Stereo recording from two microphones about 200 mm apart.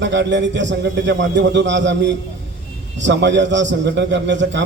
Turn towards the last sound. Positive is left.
turn(degrees=-65)  # may be behind; listen again after turning